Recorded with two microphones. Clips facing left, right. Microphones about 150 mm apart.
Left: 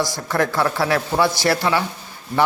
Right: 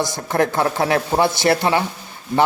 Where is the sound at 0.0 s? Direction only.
20° right (ahead or behind).